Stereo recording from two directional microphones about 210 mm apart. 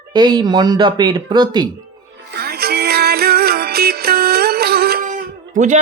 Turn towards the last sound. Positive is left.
turn(degrees=-35)  # may be behind; listen again after turning